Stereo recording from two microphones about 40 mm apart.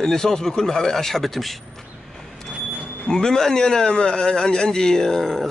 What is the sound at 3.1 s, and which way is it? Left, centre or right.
A man's voice, centre.